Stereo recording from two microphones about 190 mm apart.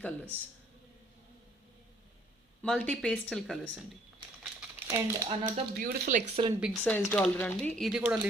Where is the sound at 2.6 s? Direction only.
5° left (ahead or behind).